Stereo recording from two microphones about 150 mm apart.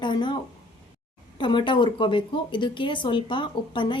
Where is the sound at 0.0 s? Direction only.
30° left (ahead or behind).